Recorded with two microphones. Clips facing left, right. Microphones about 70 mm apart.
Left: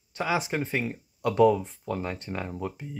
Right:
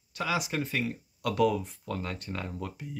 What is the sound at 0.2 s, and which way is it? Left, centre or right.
Speech, left.